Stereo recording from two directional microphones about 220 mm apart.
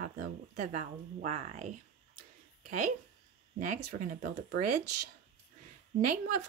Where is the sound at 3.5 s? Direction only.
35° right (ahead or behind).